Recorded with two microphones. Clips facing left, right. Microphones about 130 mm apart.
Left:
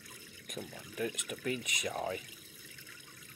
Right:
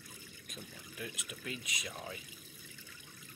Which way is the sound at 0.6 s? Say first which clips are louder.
Left 9 dB; 60° left (ahead or behind).